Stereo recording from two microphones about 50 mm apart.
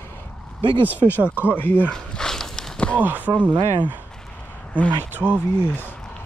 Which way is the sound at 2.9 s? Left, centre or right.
Right.